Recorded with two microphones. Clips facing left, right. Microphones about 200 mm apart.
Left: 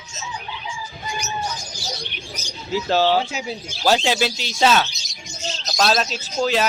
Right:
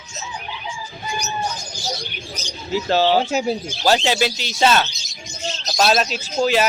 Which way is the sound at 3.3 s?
45° right (ahead or behind).